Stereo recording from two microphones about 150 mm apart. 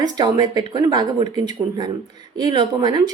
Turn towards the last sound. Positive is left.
turn(degrees=-30)  # may be behind; listen again after turning